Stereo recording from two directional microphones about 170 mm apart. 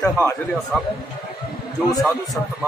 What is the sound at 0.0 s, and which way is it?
Speech, 15° left (ahead or behind).